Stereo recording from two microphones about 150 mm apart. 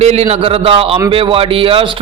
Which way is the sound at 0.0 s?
45° right (ahead or behind).